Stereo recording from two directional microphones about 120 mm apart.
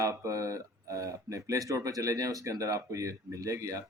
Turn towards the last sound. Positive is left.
turn(degrees=-25)  # may be behind; listen again after turning